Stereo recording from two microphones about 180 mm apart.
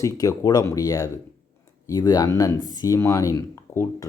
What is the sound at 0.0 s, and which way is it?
Speech, 20° left (ahead or behind).